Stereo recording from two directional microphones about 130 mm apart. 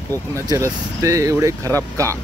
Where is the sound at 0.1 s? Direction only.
25° right (ahead or behind).